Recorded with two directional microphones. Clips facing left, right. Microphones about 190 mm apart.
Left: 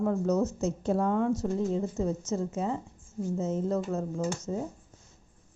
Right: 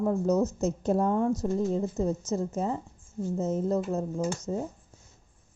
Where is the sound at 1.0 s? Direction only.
40° right (ahead or behind).